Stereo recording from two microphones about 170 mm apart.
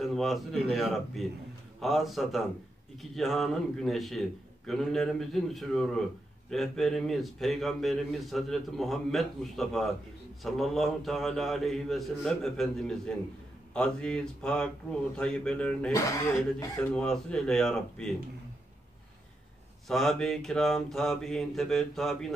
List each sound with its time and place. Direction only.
0.0 s speech: centre (ahead or behind)
15.9 s speech: 20° left (ahead or behind)
16.9 s speech: 5° left (ahead or behind)
19.9 s speech: centre (ahead or behind)